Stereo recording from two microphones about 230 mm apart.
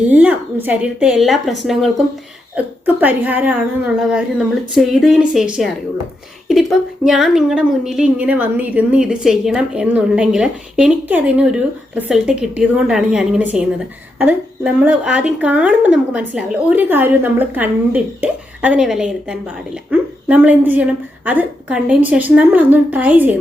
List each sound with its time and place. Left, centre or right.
0.1 s a woman's voice: centre